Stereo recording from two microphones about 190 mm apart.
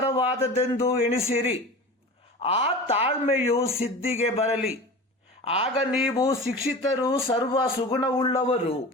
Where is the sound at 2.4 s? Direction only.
30° left (ahead or behind).